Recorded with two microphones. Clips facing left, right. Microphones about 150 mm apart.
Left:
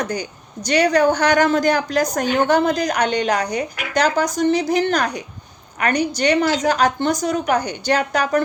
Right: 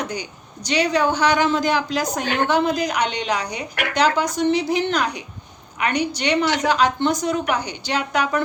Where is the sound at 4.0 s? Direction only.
40° left (ahead or behind).